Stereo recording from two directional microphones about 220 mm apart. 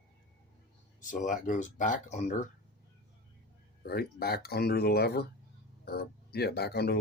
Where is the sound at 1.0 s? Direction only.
35° left (ahead or behind).